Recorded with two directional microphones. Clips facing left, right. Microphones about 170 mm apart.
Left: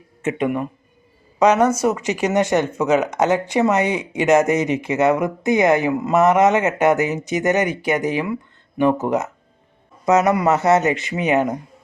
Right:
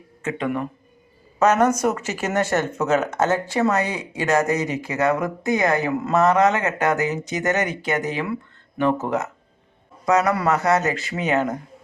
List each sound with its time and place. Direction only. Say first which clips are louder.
0.2 s speech: left 4 dB; 20° left (ahead or behind)